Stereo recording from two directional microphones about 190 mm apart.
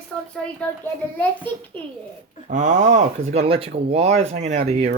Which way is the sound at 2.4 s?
40° right (ahead or behind).